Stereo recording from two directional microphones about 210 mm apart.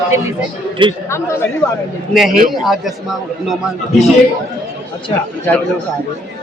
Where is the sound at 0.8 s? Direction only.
25° right (ahead or behind).